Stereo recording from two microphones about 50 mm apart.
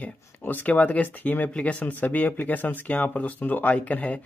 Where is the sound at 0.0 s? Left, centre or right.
Left.